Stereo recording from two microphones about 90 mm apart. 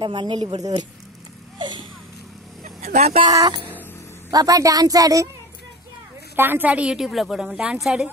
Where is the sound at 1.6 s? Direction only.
60° right (ahead or behind).